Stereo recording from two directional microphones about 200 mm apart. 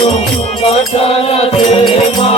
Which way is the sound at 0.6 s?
30° left (ahead or behind).